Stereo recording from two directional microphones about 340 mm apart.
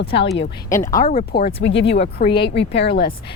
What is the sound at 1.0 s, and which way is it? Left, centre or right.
Speech, left.